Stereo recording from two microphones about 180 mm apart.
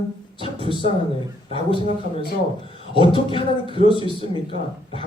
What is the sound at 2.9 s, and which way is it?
Speech, 30° left (ahead or behind).